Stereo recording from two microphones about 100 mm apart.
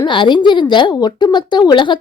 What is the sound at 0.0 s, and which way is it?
Speech, 50° left (ahead or behind).